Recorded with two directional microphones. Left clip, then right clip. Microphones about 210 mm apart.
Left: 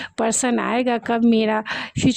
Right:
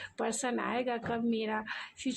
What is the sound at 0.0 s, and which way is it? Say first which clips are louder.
A woman's voice: left 13 dB; 50° left (ahead or behind).